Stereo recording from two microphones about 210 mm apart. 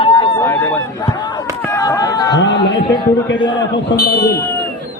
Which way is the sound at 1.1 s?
20° left (ahead or behind).